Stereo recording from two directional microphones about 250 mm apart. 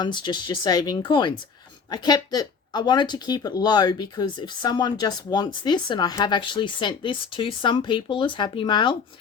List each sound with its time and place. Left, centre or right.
0.0 s speech: centre